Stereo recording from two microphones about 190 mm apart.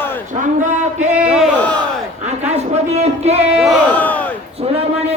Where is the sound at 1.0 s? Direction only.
5° right (ahead or behind).